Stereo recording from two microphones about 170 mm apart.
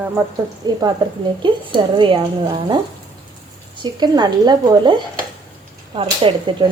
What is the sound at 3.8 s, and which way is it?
Speech, 25° right (ahead or behind).